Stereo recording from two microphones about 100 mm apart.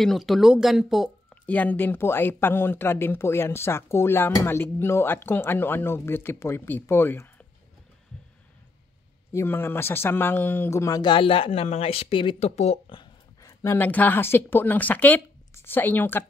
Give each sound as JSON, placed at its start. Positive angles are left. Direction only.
{"t": 0.0, "sound": "speech", "side_deg": 0}
{"t": 1.3, "sound": "speech", "side_deg": 15}
{"t": 9.3, "sound": "speech", "side_deg": 25}
{"t": 11.0, "sound": "speech", "side_deg": 55}
{"t": 13.0, "sound": "a sound", "side_deg": 40}
{"t": 13.7, "sound": "speech", "side_deg": 15}